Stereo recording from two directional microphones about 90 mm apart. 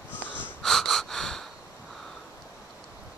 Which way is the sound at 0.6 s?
5° left (ahead or behind).